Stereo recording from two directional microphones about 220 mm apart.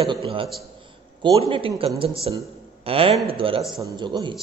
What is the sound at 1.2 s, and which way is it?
A man's voice, 20° right (ahead or behind).